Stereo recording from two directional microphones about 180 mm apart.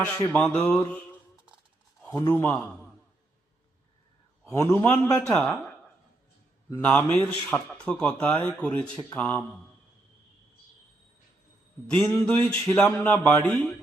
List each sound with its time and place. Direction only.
0.3 s speech: 5° left (ahead or behind)
2.0 s speech: 15° left (ahead or behind)
4.4 s speech: 15° left (ahead or behind)
5.2 s speech: 5° left (ahead or behind)
11.9 s speech: 5° left (ahead or behind)